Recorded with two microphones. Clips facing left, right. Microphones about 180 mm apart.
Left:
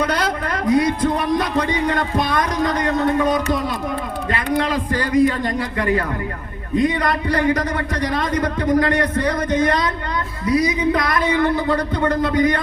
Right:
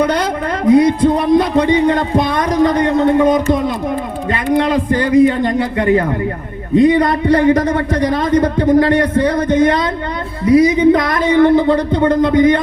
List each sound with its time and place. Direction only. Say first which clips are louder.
0.8 s a man's voice: right 7 dB; 25° right (ahead or behind)
4.5 s a man's voice: right 7 dB; 30° right (ahead or behind)